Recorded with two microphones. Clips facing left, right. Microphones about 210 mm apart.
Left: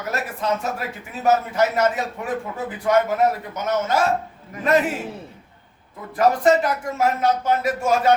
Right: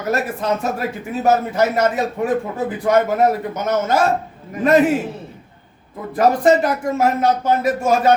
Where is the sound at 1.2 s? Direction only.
35° right (ahead or behind).